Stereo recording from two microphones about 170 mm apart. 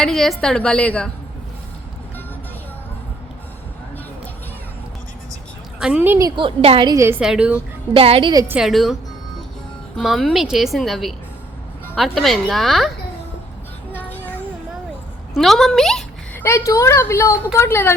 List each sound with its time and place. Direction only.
0.0 s a woman's voice: centre (ahead or behind)
5.8 s a woman's voice: 10° right (ahead or behind)
7.2 s a woman's voice: 5° right (ahead or behind)
7.9 s a woman's voice: 35° right (ahead or behind)
8.3 s a woman's voice: 20° right (ahead or behind)
8.5 s a woman's voice: centre (ahead or behind)
10.0 s a woman's voice: centre (ahead or behind)
13.9 s a sound: 10° left (ahead or behind)
15.4 s speech: centre (ahead or behind)
16.4 s a woman's voice: 15° left (ahead or behind)